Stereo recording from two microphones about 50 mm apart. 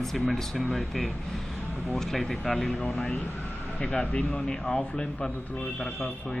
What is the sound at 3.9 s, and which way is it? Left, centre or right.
Speech, left.